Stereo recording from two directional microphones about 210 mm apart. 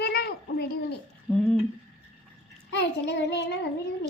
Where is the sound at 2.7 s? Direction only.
55° left (ahead or behind).